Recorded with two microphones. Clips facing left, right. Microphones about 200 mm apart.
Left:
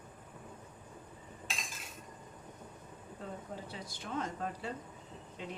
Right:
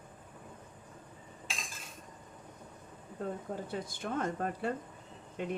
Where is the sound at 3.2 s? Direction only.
50° right (ahead or behind).